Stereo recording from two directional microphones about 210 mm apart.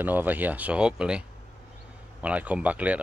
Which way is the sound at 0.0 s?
10° right (ahead or behind).